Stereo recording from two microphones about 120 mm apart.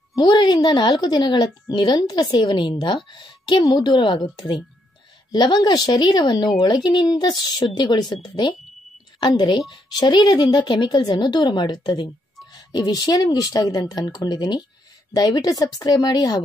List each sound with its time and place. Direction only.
0.1 s a woman's voice: 40° left (ahead or behind)
5.3 s a woman's voice: 35° left (ahead or behind)